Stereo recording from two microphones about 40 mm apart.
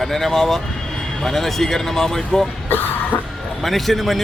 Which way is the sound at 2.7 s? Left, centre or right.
Left.